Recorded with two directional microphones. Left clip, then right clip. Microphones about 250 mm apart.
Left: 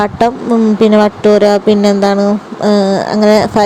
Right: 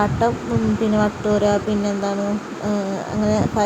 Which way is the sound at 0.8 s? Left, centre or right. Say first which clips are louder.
Left 13 dB; left.